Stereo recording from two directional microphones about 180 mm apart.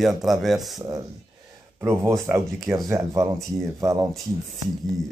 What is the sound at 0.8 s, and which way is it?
Speech, 20° right (ahead or behind).